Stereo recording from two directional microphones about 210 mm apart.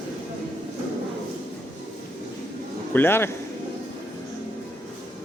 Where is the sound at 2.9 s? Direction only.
10° left (ahead or behind).